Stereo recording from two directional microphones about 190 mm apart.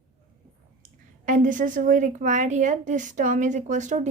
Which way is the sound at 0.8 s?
45° right (ahead or behind).